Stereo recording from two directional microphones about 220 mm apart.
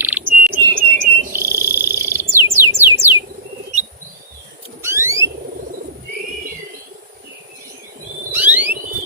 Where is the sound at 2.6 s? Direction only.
10° right (ahead or behind).